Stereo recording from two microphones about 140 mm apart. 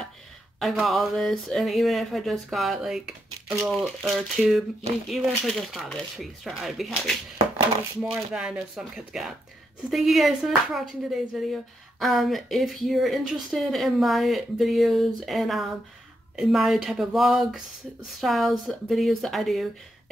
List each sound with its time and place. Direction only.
0.6 s speech: centre (ahead or behind)